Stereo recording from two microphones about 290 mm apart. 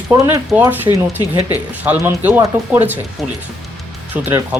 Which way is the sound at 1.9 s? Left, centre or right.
Centre.